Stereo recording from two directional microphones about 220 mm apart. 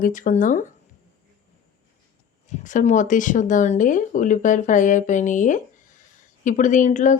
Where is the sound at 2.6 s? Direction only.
35° left (ahead or behind).